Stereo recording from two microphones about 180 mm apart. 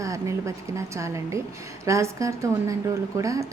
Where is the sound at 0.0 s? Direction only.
15° right (ahead or behind).